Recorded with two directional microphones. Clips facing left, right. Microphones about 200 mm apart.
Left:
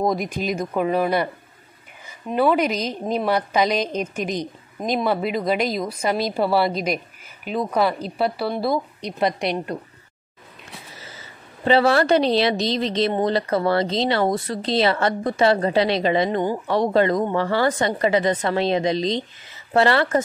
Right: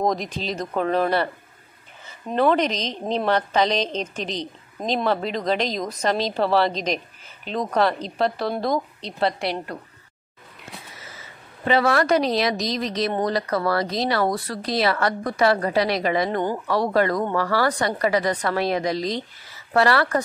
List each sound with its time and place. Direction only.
0.0 s a woman's voice: 10° left (ahead or behind)
11.0 s a woman's voice: 30° left (ahead or behind)